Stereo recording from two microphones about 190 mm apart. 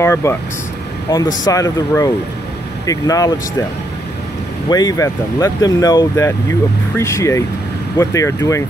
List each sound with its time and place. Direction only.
0.0 s speech: 15° left (ahead or behind)
4.6 s speech: 20° left (ahead or behind)